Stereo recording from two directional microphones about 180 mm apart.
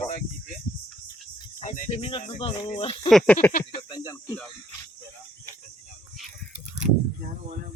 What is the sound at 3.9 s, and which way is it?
Speech, 25° left (ahead or behind).